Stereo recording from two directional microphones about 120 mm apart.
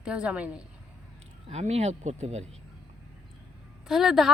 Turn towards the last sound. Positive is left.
turn(degrees=0)  # may be behind; listen again after turning